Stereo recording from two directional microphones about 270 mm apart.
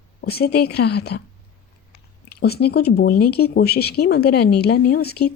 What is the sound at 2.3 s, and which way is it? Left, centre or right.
Speech, left.